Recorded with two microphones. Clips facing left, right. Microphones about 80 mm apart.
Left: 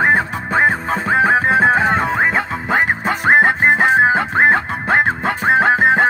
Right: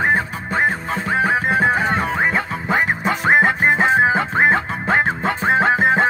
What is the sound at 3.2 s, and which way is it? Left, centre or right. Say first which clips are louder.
Music: left 3 dB; left.